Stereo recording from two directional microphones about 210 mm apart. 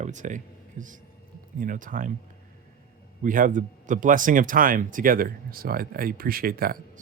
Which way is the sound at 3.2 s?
40° right (ahead or behind).